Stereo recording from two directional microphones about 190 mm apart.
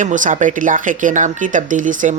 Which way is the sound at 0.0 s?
40° right (ahead or behind).